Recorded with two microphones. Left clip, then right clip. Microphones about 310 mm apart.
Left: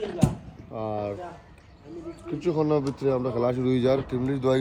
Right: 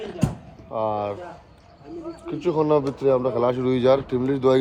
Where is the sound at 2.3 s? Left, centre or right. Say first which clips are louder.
Right 4 dB; centre.